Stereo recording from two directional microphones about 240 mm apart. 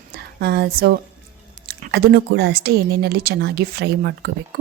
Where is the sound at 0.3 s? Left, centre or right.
Right.